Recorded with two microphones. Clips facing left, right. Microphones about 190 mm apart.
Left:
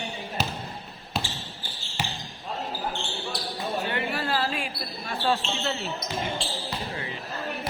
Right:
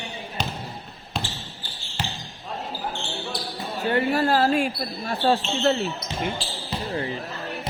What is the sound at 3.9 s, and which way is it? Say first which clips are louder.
Basketball bounce: right 7 dB; 40° right (ahead or behind).